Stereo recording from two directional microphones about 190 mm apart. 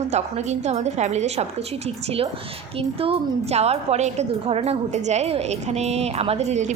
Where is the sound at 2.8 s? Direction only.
30° right (ahead or behind).